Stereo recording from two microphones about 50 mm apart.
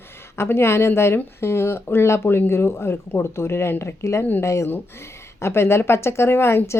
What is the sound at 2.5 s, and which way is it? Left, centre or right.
Speech, left.